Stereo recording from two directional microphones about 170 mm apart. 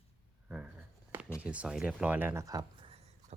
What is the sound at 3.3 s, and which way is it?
Horse, 40° right (ahead or behind).